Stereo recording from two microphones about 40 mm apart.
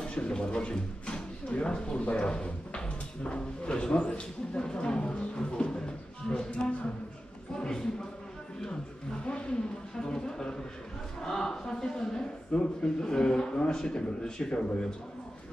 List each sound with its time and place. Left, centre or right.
0.0 s speech: left
8.6 s speech: left